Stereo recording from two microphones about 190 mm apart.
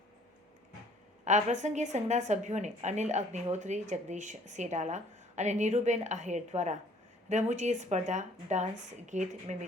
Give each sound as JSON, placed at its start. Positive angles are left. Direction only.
{"t": 1.2, "sound": "a woman's voice", "side_deg": -40}